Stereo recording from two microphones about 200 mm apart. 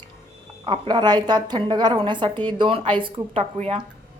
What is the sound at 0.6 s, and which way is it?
A woman's voice, 20° right (ahead or behind).